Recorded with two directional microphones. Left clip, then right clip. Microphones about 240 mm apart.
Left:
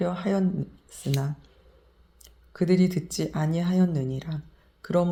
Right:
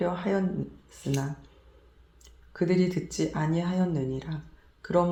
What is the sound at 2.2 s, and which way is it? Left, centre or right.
Speech, left.